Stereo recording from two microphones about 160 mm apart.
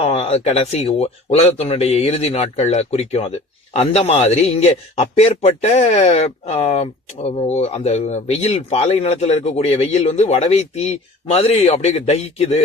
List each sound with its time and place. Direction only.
0.0 s speech: 40° left (ahead or behind)